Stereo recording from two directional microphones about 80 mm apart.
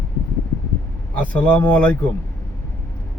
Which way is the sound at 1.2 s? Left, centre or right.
Centre.